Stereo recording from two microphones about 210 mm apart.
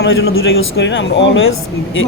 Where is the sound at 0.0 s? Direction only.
70° left (ahead or behind).